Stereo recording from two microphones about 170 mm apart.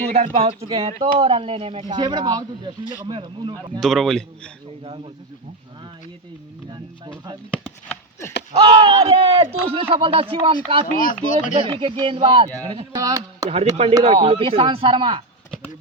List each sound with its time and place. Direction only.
0.1 s speech: 40° right (ahead or behind)
3.8 s speech: centre (ahead or behind)
4.8 s speech: 30° right (ahead or behind)
8.5 s speech: 30° right (ahead or behind)
10.9 s speech: 55° left (ahead or behind)
11.5 s speech: 30° right (ahead or behind)
14.0 s speech: 35° right (ahead or behind)